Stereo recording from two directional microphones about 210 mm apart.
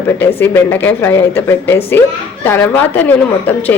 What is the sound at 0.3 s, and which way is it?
A woman's voice, 10° left (ahead or behind).